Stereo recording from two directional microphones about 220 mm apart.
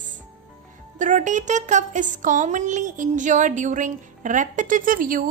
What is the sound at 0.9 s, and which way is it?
Speech, 35° right (ahead or behind).